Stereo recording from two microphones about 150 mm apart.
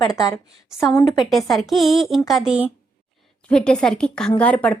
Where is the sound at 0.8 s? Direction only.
25° left (ahead or behind).